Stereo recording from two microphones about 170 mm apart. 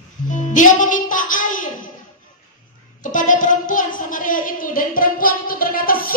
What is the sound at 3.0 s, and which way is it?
A woman's voice, 50° left (ahead or behind).